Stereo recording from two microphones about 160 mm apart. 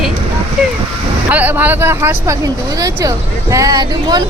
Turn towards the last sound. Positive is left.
turn(degrees=-25)  # may be behind; listen again after turning